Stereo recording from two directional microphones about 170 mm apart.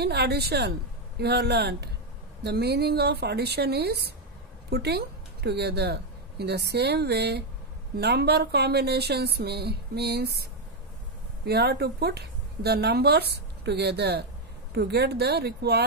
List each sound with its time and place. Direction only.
0.0 s a woman's voice: 75° right (ahead or behind)